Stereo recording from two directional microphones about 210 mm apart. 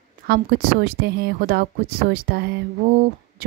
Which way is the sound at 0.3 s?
45° right (ahead or behind).